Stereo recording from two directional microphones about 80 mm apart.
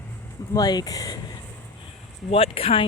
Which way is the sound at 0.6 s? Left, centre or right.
Left.